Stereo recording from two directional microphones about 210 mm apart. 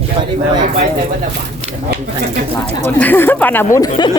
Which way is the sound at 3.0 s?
10° left (ahead or behind).